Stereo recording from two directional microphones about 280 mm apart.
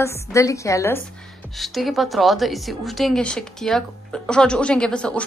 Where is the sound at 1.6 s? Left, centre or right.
Centre.